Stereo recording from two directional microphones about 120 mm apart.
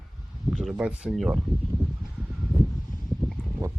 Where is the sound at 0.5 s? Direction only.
5° right (ahead or behind).